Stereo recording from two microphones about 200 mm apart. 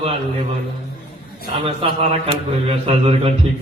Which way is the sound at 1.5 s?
30° right (ahead or behind).